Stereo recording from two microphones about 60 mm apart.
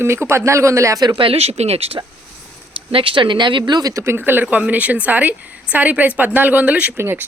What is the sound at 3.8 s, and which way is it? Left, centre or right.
Speech, right.